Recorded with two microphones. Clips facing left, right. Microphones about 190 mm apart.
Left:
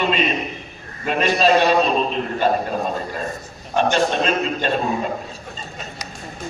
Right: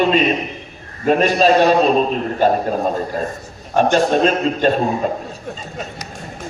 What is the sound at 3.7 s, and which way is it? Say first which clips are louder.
Speech: right 4 dB; 45° right (ahead or behind).